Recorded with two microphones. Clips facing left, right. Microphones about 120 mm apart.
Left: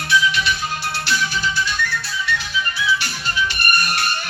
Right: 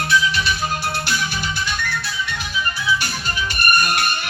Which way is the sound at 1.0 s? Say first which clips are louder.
Left 2 dB; 50° right (ahead or behind).